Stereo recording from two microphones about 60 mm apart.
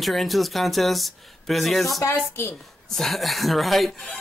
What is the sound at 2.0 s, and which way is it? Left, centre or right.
Speech, left.